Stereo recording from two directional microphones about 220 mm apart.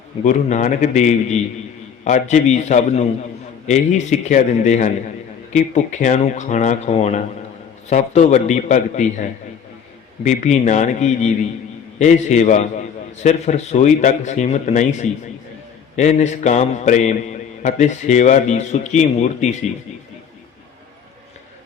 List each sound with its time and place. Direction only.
0.3 s a man's voice: 35° left (ahead or behind)
10.2 s a man's voice: 30° left (ahead or behind)